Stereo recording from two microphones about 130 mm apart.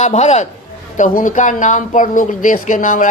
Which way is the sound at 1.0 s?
80° left.